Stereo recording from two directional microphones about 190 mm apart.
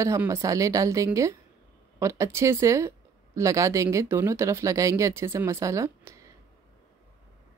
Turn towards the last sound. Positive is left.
turn(degrees=-15)  # may be behind; listen again after turning